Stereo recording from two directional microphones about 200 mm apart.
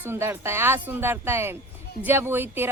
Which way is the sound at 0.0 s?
10° right (ahead or behind).